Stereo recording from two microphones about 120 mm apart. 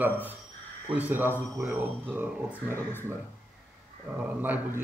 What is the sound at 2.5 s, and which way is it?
Speech, 15° left (ahead or behind).